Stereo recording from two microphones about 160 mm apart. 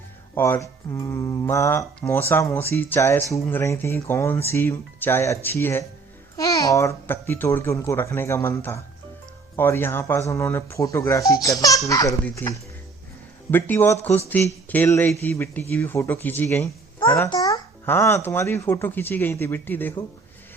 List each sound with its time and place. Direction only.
0.3 s a child's voice: 15° left (ahead or behind)
17.0 s a child's voice: 30° left (ahead or behind); by 20.1 s 10° left (ahead or behind)